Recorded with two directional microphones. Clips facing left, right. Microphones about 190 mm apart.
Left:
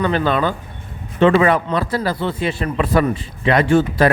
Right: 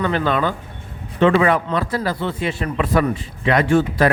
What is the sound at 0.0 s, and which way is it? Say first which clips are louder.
Speech: left 2 dB; 30° left (ahead or behind).